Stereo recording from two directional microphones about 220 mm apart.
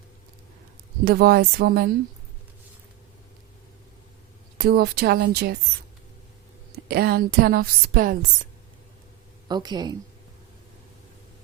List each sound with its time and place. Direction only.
1.0 s a woman's voice: 45° right (ahead or behind)
4.5 s a woman's voice: 45° right (ahead or behind)
6.8 s a woman's voice: 45° right (ahead or behind)
9.5 s a woman's voice: 20° right (ahead or behind)